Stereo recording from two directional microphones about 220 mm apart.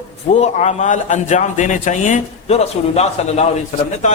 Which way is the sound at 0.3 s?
30° left (ahead or behind).